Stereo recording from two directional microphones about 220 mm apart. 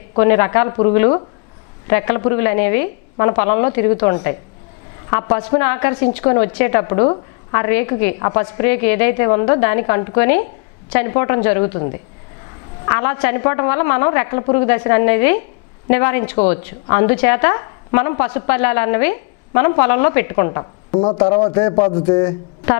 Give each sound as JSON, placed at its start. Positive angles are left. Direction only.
{"t": 0.2, "sound": "a woman's voice", "side_deg": 15}
{"t": 12.8, "sound": "a woman's voice", "side_deg": 15}